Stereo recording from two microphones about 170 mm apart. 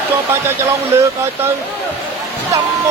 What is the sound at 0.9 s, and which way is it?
Speech, 15° right (ahead or behind).